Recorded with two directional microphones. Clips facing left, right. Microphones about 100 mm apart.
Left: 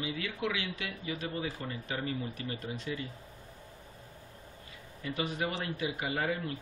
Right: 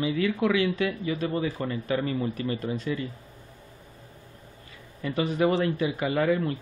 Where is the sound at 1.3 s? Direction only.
70° right (ahead or behind).